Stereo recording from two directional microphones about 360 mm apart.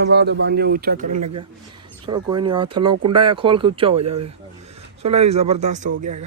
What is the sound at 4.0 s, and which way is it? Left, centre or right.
Speech, right.